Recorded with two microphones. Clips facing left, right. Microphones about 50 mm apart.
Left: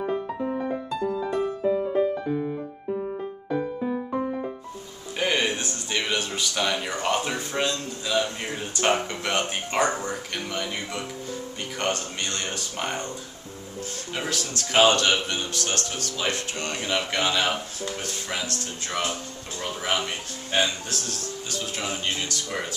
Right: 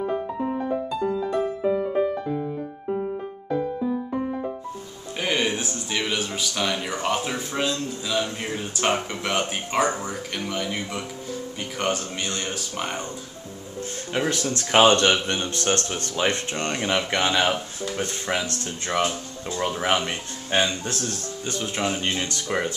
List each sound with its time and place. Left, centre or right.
5.1 s speech: centre
14.3 s speech: right
16.7 s speech: right
18.4 s speech: centre